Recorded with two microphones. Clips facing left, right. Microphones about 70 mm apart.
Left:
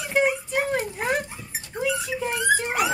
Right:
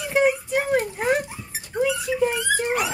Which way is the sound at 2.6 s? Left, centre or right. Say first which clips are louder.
Right 1 dB; centre.